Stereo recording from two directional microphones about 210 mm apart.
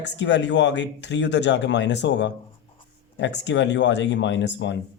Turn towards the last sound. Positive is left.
turn(degrees=60)  # may be behind; listen again after turning